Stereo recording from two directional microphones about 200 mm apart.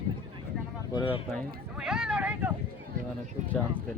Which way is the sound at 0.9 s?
25° left (ahead or behind).